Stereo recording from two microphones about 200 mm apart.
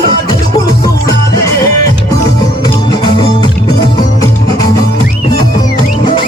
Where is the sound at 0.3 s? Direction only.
25° left (ahead or behind).